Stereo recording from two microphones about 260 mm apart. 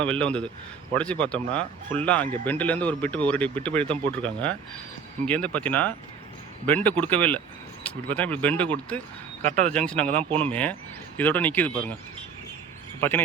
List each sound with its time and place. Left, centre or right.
0.0 s speech: centre
9.4 s speech: right
9.7 s speech: centre
10.1 s speech: right
10.4 s speech: centre
13.0 s speech: centre